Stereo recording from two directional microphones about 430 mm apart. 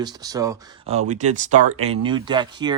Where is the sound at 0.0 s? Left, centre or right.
Centre.